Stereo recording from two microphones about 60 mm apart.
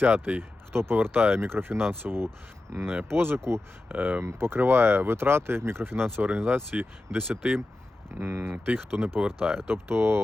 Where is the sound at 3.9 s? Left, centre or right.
Right.